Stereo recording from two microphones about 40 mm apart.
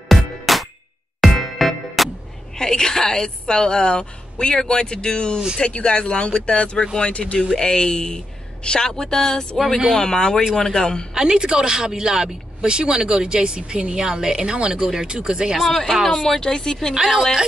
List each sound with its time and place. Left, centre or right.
0.1 s music: centre
2.5 s a woman's voice: centre; by 7.3 s left
7.5 s a woman's voice: centre
11.1 s speech: centre
15.7 s speech: centre
16.1 s speech: centre
16.9 s a woman's voice: centre